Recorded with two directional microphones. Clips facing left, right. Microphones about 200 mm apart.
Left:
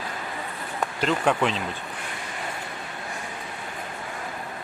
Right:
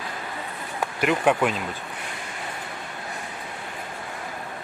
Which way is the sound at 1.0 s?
10° right (ahead or behind).